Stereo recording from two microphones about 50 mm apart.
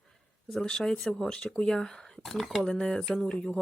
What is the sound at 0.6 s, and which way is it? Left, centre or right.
Speech, centre.